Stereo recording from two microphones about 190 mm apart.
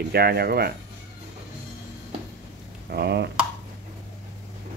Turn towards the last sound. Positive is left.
turn(degrees=-60)  # may be behind; listen again after turning